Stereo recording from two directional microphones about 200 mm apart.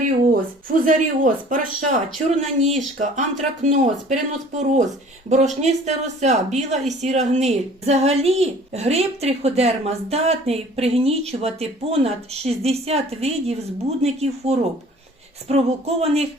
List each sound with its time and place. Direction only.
0.7 s a woman's voice: 40° right (ahead or behind)